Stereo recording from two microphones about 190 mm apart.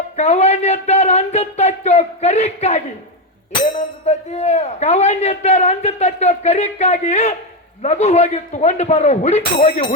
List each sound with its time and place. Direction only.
0.2 s a man's voice: 35° left (ahead or behind)
4.0 s a man's voice: 35° left (ahead or behind)
9.6 s speech: 50° left (ahead or behind)